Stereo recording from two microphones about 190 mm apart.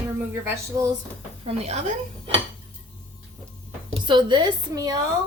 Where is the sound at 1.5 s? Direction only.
35° right (ahead or behind).